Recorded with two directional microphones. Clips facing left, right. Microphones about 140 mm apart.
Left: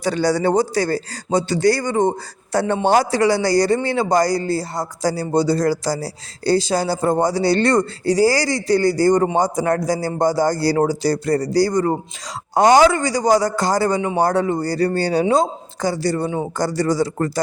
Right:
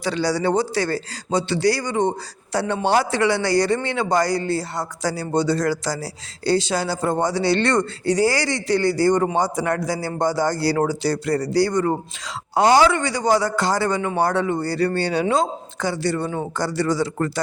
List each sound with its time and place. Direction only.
0.0 s a man's voice: 45° left (ahead or behind)
16.2 s speech: 15° left (ahead or behind)
16.6 s speech: 40° left (ahead or behind)